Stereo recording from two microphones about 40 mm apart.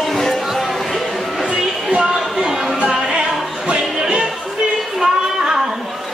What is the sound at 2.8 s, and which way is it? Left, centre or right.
Music, right.